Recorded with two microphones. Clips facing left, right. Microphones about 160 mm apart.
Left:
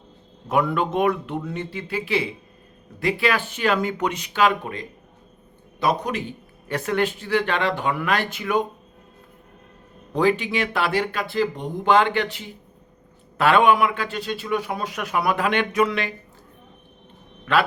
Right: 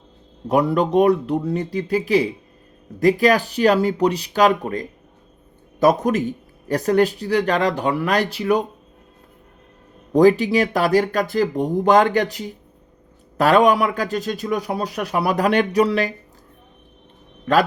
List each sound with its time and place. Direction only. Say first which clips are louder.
0.4 s a man's voice: right 4 dB; 40° right (ahead or behind)
10.1 s a man's voice: right 7 dB; 40° right (ahead or behind)
17.5 s a man's voice: right 4 dB; 40° right (ahead or behind)